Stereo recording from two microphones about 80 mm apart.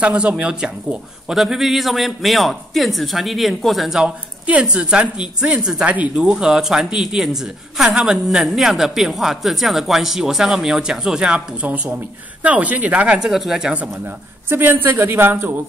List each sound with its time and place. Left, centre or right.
0.0 s a woman's voice: centre
4.0 s a woman's voice: centre
14.5 s speech: right